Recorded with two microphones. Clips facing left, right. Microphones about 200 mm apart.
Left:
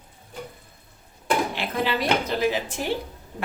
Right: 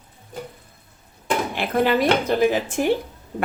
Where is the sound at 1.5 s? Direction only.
50° right (ahead or behind).